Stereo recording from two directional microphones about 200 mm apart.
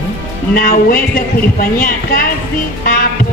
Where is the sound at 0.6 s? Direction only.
45° left (ahead or behind).